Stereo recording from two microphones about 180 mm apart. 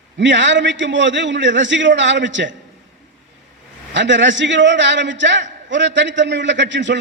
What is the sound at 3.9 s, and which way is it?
A man's voice, 90° right.